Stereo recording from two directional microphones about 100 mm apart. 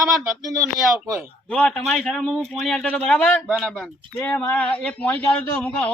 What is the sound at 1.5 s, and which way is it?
A man's voice, 5° left (ahead or behind).